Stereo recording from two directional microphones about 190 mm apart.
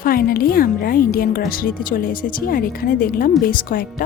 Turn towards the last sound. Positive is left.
turn(degrees=45)  # may be behind; listen again after turning